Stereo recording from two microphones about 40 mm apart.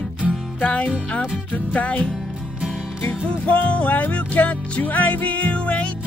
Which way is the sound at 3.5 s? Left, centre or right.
Left.